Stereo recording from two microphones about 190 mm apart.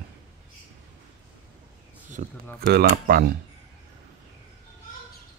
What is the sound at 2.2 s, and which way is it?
Speech, 45° right (ahead or behind).